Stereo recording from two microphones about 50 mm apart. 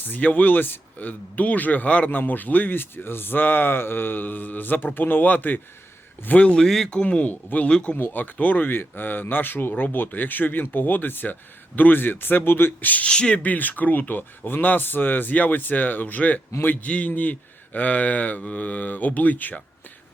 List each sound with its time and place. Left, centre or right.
0.0 s speech: left
6.6 s speech: centre
6.9 s speech: left
7.7 s speech: centre
7.9 s speech: left
13.1 s speech: centre
13.4 s speech: left